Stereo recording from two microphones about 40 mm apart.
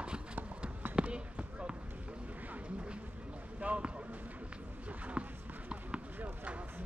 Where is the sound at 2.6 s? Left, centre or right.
Right.